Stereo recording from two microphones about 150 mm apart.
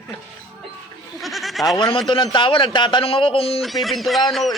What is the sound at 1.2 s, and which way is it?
Goat, centre (ahead or behind).